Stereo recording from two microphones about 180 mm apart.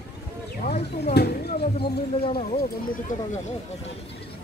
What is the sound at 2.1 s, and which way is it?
Speech, 30° left (ahead or behind).